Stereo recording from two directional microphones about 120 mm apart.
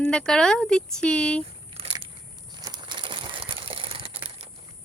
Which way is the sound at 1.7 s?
55° right (ahead or behind).